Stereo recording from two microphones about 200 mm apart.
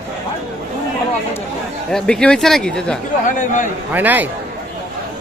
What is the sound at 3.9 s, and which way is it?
Speech, 10° right (ahead or behind).